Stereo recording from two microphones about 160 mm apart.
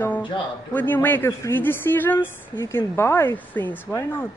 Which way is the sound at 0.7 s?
10° left (ahead or behind).